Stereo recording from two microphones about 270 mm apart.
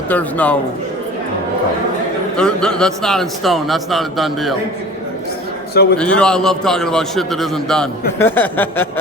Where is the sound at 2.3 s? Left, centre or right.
Centre.